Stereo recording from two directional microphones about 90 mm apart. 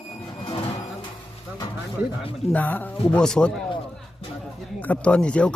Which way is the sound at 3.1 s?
10° left (ahead or behind).